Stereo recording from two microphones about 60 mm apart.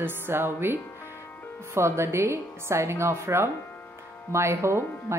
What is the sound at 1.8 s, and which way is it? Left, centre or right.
A woman's voice, right.